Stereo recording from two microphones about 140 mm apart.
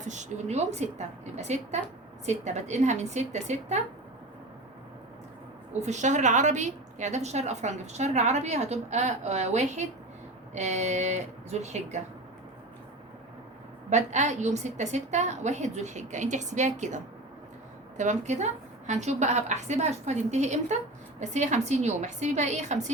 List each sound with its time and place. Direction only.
0.0 s a woman's voice: 55° right (ahead or behind)
5.8 s a woman's voice: 55° right (ahead or behind)
13.9 s a woman's voice: 55° right (ahead or behind)